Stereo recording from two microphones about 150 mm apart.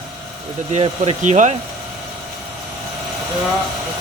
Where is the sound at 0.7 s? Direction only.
45° right (ahead or behind).